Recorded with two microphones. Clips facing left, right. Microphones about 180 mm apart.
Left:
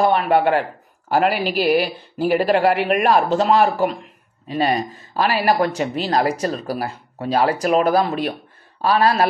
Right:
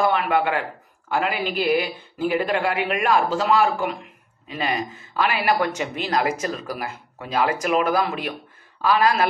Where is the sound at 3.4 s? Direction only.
35° left (ahead or behind).